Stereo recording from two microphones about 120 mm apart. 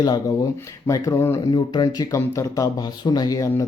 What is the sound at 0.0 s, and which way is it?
Speech, 30° left (ahead or behind).